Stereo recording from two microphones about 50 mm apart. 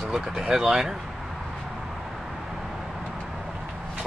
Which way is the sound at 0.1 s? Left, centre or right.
Centre.